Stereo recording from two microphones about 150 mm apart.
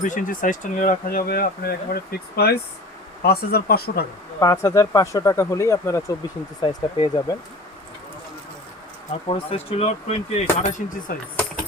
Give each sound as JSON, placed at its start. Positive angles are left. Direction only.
{"t": 0.0, "sound": "speech", "side_deg": 60}
{"t": 4.4, "sound": "speech", "side_deg": 20}
{"t": 9.2, "sound": "speech", "side_deg": 40}